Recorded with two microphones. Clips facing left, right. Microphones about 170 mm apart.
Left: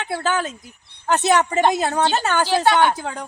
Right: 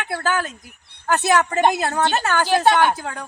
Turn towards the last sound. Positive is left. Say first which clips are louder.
# even
turn(degrees=20)  # may be behind; listen again after turning